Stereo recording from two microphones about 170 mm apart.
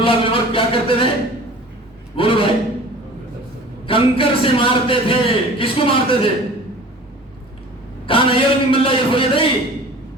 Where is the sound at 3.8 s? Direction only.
30° left (ahead or behind).